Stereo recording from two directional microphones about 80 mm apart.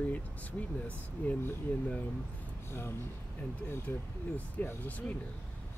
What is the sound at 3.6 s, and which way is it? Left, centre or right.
Speech, left.